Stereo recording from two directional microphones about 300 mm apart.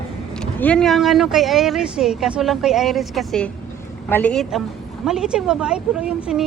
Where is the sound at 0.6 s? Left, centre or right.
Centre.